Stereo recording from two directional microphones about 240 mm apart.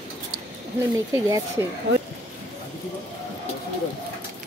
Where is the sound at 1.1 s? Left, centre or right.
Centre.